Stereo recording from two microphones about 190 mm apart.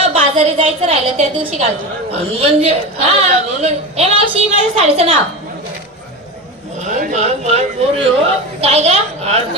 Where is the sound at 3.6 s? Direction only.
35° right (ahead or behind).